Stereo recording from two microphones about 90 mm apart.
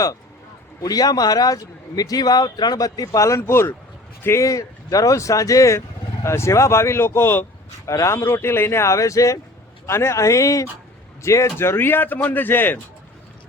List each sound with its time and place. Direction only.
0.8 s speech: 45° left (ahead or behind); by 12.8 s 25° left (ahead or behind)